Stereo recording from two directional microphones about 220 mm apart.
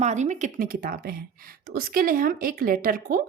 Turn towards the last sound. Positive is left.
turn(degrees=-40)  # may be behind; listen again after turning